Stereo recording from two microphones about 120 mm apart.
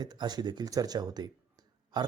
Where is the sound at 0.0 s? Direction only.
35° right (ahead or behind).